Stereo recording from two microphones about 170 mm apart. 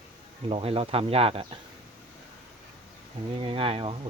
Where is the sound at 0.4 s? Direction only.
35° right (ahead or behind).